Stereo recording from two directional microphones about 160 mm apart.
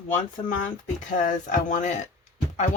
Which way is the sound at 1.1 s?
55° left (ahead or behind).